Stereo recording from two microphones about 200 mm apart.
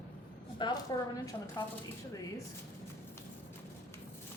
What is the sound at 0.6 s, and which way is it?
Speech, 25° left (ahead or behind).